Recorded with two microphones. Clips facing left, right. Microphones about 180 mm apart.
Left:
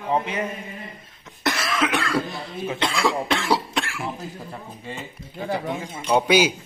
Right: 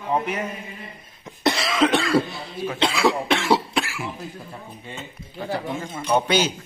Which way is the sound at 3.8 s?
5° right (ahead or behind).